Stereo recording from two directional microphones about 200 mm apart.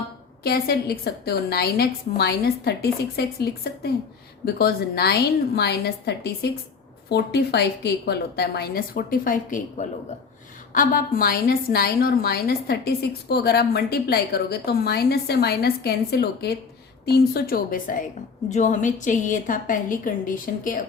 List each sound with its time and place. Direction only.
0.4 s a woman's voice: 50° left (ahead or behind)